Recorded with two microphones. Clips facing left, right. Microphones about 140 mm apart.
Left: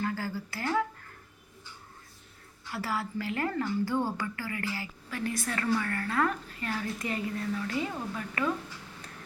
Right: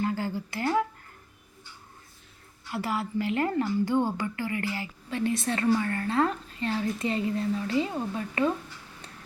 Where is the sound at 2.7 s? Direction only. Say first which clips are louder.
Right 4 dB; 20° right (ahead or behind).